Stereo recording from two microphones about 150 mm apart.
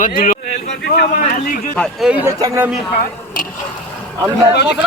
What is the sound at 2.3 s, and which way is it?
Speech, 20° right (ahead or behind).